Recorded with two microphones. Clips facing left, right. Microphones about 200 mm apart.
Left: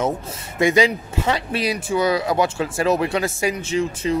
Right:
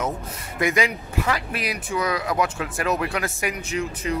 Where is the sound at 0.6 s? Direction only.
30° left (ahead or behind).